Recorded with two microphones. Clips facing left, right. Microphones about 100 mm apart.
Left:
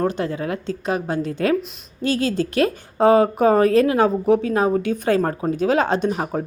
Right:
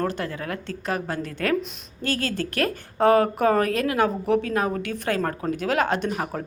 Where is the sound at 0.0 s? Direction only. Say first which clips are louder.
Left 5 dB; 20° left (ahead or behind).